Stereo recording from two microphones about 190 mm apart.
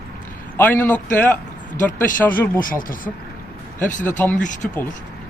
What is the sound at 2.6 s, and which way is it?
Speech, 45° left (ahead or behind).